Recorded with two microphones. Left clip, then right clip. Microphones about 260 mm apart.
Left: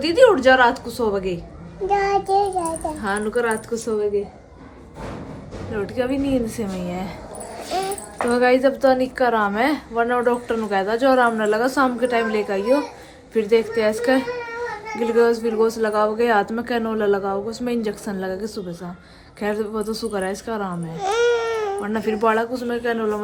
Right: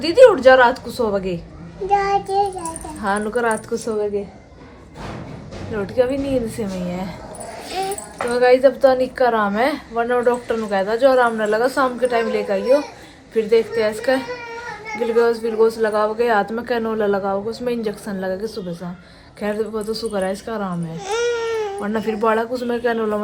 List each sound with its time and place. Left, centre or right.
0.0 s a man's voice: centre
1.9 s child singing: left
3.0 s a man's voice: centre
5.7 s a woman's voice: centre
21.5 s baby cry: centre
21.8 s a man's voice: centre